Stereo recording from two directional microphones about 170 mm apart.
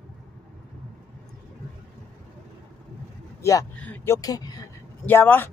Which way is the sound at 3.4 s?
20° left (ahead or behind).